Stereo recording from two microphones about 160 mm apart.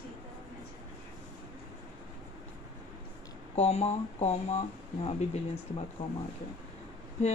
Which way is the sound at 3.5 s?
45° left (ahead or behind).